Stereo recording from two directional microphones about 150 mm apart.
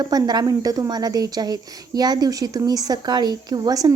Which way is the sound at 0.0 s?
25° right (ahead or behind).